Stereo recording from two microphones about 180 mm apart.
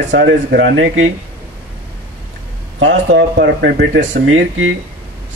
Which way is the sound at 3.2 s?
65° right (ahead or behind).